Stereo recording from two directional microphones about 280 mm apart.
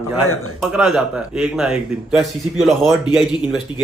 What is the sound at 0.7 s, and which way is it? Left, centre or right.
Speech, centre.